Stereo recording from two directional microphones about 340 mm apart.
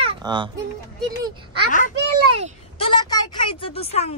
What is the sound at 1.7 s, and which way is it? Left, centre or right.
Speech, left.